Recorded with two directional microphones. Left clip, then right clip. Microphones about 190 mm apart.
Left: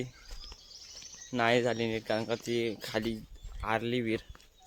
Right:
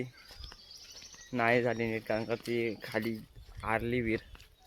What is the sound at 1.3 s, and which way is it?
Speech, 10° left (ahead or behind).